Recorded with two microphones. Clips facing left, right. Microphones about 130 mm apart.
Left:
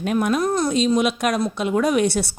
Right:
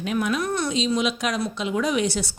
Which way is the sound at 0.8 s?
55° left (ahead or behind).